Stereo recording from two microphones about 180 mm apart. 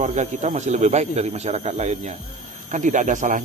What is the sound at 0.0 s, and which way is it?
Speech, 40° right (ahead or behind).